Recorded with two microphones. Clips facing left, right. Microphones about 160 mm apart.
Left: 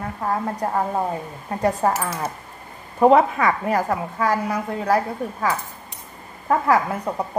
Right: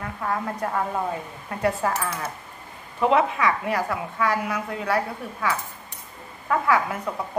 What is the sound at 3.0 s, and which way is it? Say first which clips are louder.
A woman's voice: left 5 dB; 45° left (ahead or behind).